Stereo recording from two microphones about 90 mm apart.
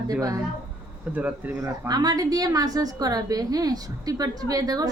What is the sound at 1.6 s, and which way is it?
A woman's voice, 40° right (ahead or behind).